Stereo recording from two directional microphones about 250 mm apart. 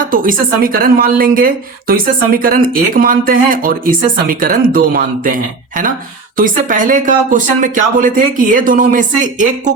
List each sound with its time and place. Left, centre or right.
0.1 s speech: right